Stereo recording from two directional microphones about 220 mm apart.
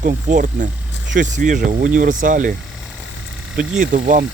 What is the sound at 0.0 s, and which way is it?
Speech, 35° right (ahead or behind).